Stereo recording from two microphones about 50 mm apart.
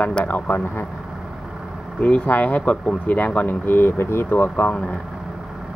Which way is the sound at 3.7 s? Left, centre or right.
Left.